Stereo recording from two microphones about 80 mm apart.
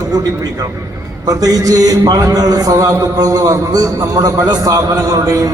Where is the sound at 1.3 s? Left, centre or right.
Right.